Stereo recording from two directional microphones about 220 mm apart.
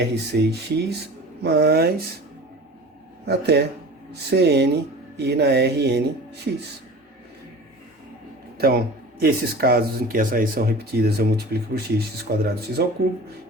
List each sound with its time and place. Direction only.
0.0 s speech: 50° right (ahead or behind)
3.2 s speech: 50° right (ahead or behind)
8.5 s speech: 45° right (ahead or behind)